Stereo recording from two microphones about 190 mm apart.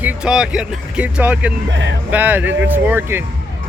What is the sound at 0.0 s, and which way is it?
Speech, 5° right (ahead or behind).